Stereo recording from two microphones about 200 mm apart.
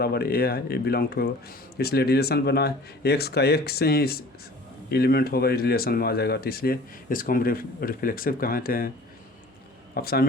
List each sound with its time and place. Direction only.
0.0 s speech: 50° left (ahead or behind)
9.9 s speech: 50° left (ahead or behind)